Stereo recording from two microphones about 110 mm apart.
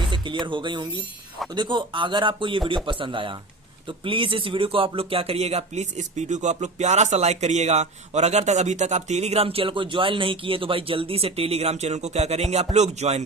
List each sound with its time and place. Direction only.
0.1 s speech: 45° right (ahead or behind); by 12.6 s 75° right (ahead or behind)
12.7 s music: 90° right